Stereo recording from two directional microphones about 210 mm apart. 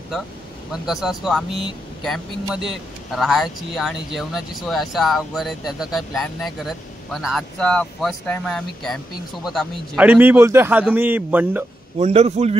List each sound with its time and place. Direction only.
0.7 s speech: centre (ahead or behind)
12.0 s a man's voice: 30° right (ahead or behind)